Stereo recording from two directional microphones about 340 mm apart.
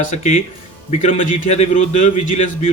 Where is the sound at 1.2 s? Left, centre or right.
Left.